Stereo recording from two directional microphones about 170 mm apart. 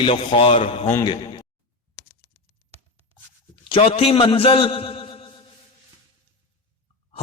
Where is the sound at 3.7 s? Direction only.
35° left (ahead or behind).